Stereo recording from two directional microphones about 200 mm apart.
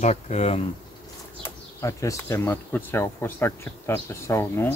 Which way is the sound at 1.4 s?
15° left (ahead or behind).